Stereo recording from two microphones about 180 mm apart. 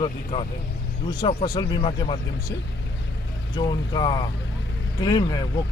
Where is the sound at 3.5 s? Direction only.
25° left (ahead or behind).